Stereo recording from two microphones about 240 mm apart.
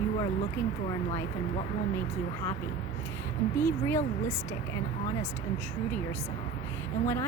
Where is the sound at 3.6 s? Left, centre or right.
Centre.